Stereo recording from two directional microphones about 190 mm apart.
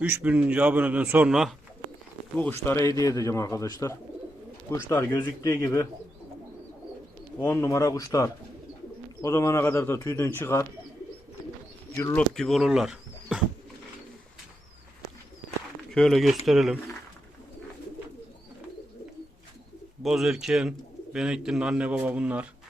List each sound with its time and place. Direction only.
0.0 s a man's voice: 10° right (ahead or behind)
2.3 s speech: 10° left (ahead or behind)
7.3 s speech: 15° left (ahead or behind)
12.1 s speech: centre (ahead or behind)
15.9 s speech: centre (ahead or behind)
20.0 s speech: centre (ahead or behind)